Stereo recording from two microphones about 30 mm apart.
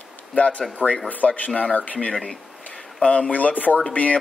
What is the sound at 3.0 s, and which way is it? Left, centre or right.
Speech, left.